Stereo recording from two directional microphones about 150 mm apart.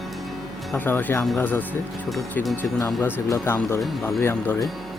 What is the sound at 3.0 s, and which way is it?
Speech, 15° left (ahead or behind).